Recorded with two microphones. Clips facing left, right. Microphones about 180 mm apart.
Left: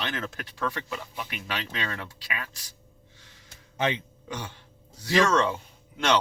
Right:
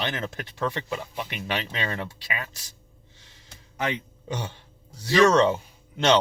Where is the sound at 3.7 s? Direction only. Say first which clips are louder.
Left 1 dB; 25° left (ahead or behind).